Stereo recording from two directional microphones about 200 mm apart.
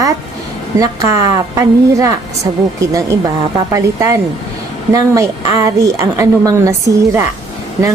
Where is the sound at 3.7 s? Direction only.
15° right (ahead or behind).